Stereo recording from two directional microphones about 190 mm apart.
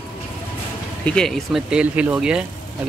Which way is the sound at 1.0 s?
5° left (ahead or behind).